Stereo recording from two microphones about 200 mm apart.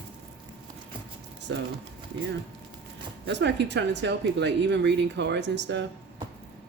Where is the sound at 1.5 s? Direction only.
70° right (ahead or behind).